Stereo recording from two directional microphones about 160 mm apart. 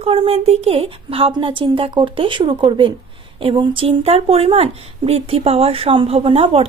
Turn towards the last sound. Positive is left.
turn(degrees=-40)  # may be behind; listen again after turning